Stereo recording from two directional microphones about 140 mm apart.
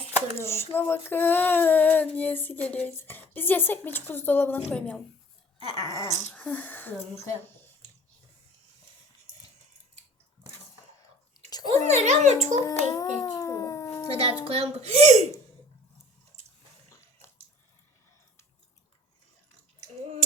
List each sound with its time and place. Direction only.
0.3 s speech: 20° left (ahead or behind)
5.5 s dog: 30° right (ahead or behind)
6.3 s speech: 10° left (ahead or behind)
11.9 s speech: 55° right (ahead or behind)
12.6 s a sound: 25° left (ahead or behind)
14.4 s speech: 50° right (ahead or behind)